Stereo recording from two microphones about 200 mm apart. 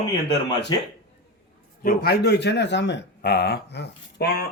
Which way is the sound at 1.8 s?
45° left (ahead or behind).